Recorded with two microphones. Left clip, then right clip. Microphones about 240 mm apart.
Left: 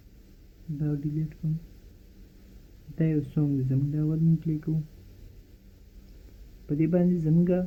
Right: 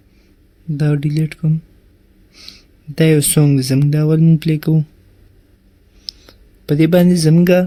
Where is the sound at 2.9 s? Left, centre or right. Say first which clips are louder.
Right 16 dB; right.